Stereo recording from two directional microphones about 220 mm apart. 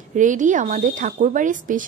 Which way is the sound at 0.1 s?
35° right (ahead or behind).